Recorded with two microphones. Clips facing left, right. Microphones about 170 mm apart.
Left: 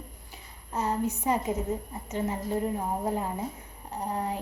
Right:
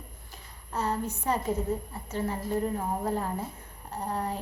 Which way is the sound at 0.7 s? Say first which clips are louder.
Left 2 dB; 10° left (ahead or behind).